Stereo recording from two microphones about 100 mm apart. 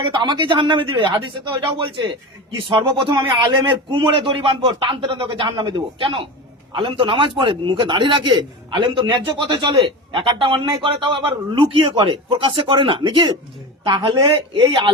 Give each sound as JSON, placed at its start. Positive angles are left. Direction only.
{"t": 0.0, "sound": "a man's voice", "side_deg": -50}
{"t": 3.2, "sound": "a man's voice", "side_deg": -45}